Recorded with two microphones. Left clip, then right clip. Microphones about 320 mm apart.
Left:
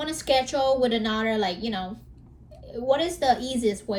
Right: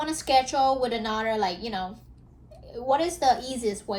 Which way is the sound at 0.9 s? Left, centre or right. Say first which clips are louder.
Left 1 dB; right.